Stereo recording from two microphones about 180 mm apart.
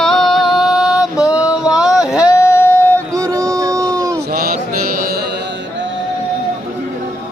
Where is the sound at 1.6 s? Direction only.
5° right (ahead or behind).